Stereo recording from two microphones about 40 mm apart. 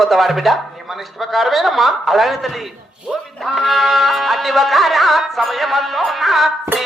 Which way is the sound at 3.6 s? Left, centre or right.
Centre.